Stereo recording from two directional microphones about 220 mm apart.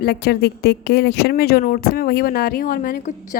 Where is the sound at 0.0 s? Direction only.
45° left (ahead or behind).